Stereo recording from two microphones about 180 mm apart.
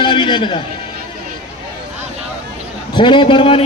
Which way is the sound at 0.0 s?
25° left (ahead or behind).